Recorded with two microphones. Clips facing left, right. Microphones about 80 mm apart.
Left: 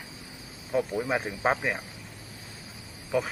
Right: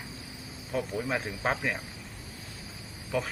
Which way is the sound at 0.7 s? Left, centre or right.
Centre.